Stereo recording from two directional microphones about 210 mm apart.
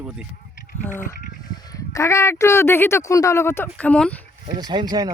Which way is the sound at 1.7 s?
15° left (ahead or behind).